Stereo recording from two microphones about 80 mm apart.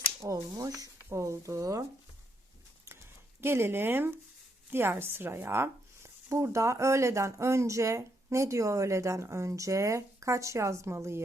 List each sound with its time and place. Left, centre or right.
0.2 s speech: right
3.4 s speech: right